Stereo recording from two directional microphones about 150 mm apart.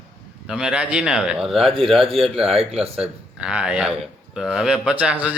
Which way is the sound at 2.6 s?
40° right (ahead or behind).